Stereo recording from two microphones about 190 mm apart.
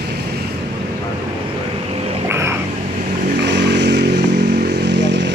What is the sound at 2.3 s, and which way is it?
Vehicle, 15° right (ahead or behind).